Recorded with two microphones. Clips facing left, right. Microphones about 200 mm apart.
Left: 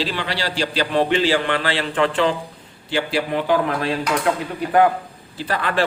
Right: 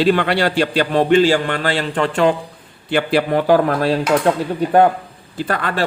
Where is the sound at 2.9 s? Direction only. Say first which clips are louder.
Right 5 dB; 55° right (ahead or behind); by 4.3 s 40° right (ahead or behind).